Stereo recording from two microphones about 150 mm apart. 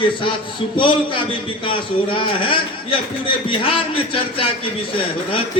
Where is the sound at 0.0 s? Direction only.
35° left (ahead or behind).